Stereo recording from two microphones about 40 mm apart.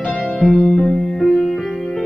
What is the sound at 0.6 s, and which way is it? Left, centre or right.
Music, left.